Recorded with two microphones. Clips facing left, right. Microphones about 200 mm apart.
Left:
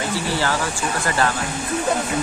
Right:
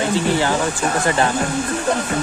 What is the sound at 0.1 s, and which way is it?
Speech, 20° right (ahead or behind).